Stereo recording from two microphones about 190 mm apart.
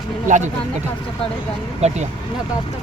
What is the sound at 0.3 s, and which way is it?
Speech, 40° right (ahead or behind).